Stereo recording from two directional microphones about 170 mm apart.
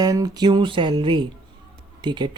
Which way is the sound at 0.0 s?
20° right (ahead or behind).